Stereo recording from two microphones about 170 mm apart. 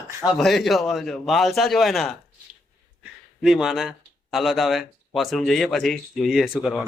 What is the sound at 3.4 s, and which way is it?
Speech, centre (ahead or behind).